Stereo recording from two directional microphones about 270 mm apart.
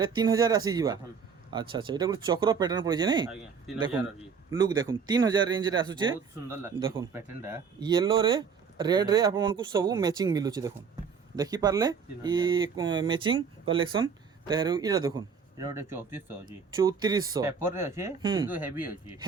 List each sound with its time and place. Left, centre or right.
0.0 s speech: centre
4.5 s speech: centre